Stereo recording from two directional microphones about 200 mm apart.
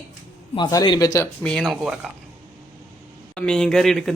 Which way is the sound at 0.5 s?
20° left (ahead or behind).